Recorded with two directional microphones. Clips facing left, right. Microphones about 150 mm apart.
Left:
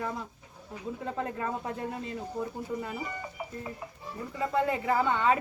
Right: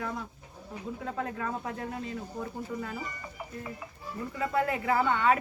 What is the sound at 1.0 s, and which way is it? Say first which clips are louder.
Speech: left 1 dB; 5° left (ahead or behind).